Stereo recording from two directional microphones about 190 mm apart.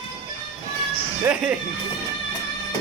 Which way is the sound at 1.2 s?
5° right (ahead or behind).